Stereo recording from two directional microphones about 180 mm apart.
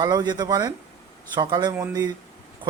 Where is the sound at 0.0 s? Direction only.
25° right (ahead or behind).